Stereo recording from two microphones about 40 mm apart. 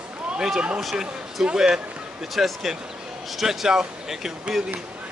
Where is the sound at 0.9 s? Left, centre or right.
Centre.